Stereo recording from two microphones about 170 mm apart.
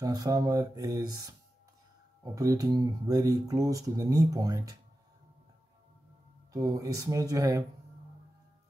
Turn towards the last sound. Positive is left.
turn(degrees=-20)  # may be behind; listen again after turning